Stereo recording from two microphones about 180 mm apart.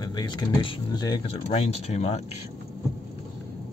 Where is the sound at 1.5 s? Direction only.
35° left (ahead or behind).